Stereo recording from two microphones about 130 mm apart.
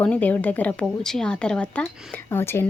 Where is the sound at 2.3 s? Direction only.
20° left (ahead or behind).